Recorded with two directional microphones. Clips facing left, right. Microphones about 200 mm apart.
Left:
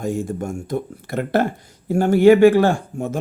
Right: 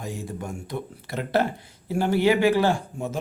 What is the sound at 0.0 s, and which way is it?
Speech, 50° left (ahead or behind).